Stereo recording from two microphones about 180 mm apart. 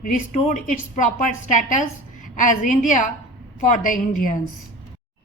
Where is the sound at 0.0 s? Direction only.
45° left (ahead or behind).